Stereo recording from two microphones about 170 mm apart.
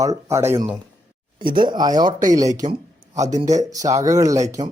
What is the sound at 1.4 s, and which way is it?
Speech, 30° right (ahead or behind).